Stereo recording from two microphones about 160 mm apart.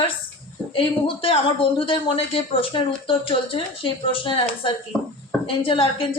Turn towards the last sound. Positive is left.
turn(degrees=35)  # may be behind; listen again after turning